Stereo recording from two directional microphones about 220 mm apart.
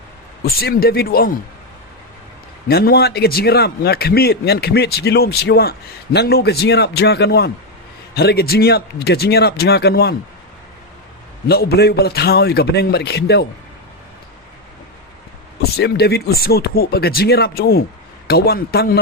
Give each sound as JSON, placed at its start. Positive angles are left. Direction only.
{"t": 0.4, "sound": "a man's voice", "side_deg": 45}
{"t": 2.6, "sound": "a man's voice", "side_deg": 45}
{"t": 11.4, "sound": "a man's voice", "side_deg": 45}
{"t": 15.7, "sound": "a man's voice", "side_deg": 45}